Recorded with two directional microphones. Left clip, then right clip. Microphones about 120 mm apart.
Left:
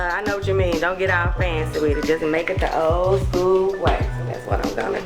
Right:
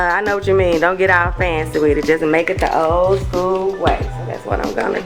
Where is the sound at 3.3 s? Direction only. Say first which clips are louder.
Right 2 dB; centre (ahead or behind).